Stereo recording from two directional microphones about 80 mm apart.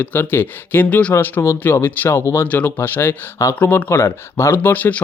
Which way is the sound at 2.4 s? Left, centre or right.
Left.